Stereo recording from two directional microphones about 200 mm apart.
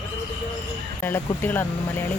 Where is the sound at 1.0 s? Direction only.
10° left (ahead or behind).